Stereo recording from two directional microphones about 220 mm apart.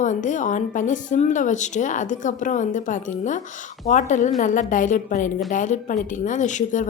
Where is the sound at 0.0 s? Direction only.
35° left (ahead or behind).